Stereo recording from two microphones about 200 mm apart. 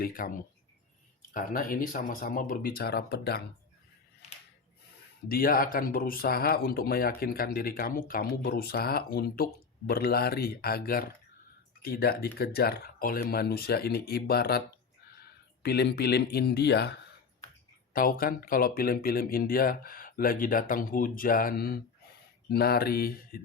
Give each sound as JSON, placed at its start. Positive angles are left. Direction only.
{"t": 0.0, "sound": "speech", "side_deg": 45}
{"t": 5.3, "sound": "speech", "side_deg": 45}
{"t": 15.6, "sound": "speech", "side_deg": 55}